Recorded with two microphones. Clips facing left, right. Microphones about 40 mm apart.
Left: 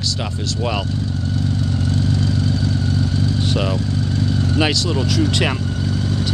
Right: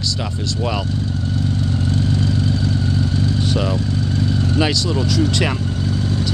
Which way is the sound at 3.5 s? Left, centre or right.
Centre.